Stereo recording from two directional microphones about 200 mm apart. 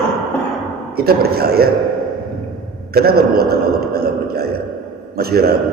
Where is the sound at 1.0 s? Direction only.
50° right (ahead or behind).